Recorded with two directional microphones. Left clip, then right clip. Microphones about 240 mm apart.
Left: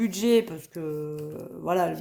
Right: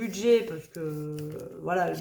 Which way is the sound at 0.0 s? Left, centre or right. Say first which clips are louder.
Left 1 dB; left.